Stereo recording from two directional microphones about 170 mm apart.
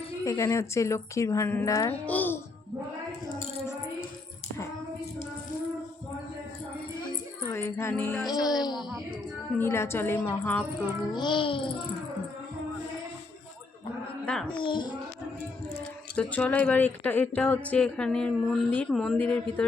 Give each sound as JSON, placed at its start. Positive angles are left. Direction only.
{"t": 0.3, "sound": "a child's voice", "side_deg": 20}
{"t": 7.5, "sound": "music", "side_deg": 15}
{"t": 8.6, "sound": "a child's voice", "side_deg": 25}
{"t": 9.6, "sound": "speech", "side_deg": 15}
{"t": 11.1, "sound": "a child's voice", "side_deg": 25}
{"t": 14.3, "sound": "a child's voice", "side_deg": 5}
{"t": 14.6, "sound": "a child's voice", "side_deg": 30}
{"t": 16.1, "sound": "speech", "side_deg": 10}